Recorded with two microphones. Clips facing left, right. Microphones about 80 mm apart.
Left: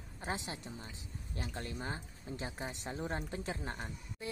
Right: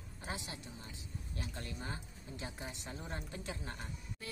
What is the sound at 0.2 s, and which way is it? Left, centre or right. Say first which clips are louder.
A woman's voice: left 4 dB; left.